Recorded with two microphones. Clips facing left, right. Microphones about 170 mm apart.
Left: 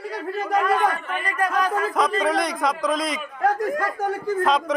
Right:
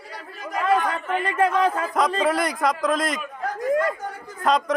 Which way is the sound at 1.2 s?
25° right (ahead or behind).